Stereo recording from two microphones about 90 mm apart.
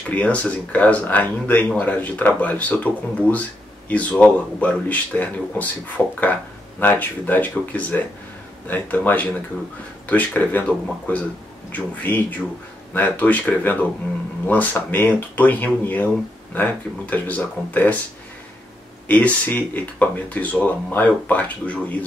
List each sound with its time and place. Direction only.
0.1 s speech: 15° left (ahead or behind)
11.7 s speech: 20° left (ahead or behind)
19.0 s speech: 20° left (ahead or behind)